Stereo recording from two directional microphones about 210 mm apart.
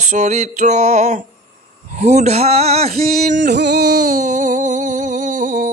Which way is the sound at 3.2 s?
50° right (ahead or behind).